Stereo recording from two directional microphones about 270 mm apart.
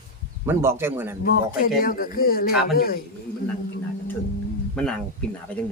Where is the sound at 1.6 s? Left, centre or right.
Left.